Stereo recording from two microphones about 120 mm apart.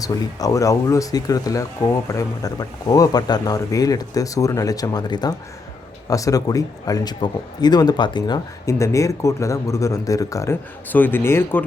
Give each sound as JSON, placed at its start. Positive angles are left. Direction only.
{"t": 0.0, "sound": "speech", "side_deg": 30}